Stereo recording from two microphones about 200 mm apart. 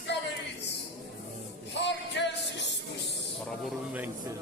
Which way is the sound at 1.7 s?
60° left (ahead or behind).